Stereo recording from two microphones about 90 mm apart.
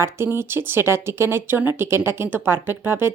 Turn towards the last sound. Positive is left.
turn(degrees=-25)  # may be behind; listen again after turning